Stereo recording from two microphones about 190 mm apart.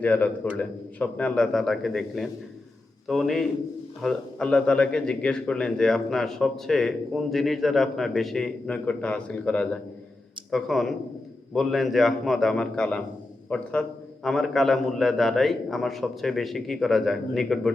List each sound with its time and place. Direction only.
0.0 s a man's voice: 10° left (ahead or behind)